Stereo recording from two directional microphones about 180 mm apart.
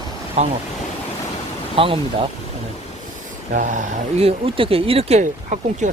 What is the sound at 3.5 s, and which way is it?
Speech, 45° right (ahead or behind).